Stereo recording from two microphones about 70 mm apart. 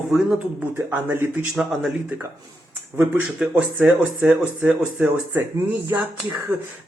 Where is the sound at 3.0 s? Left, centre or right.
Right.